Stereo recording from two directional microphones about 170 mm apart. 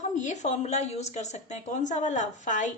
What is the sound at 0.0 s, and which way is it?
A woman's voice, 45° left (ahead or behind).